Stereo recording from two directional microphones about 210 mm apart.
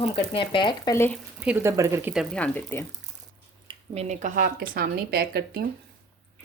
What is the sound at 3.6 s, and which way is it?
Speech, 30° right (ahead or behind).